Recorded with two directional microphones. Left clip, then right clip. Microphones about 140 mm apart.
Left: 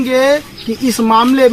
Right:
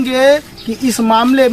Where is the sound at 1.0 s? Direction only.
45° right (ahead or behind).